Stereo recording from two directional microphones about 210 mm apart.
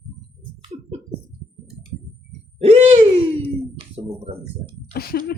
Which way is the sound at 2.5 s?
30° right (ahead or behind).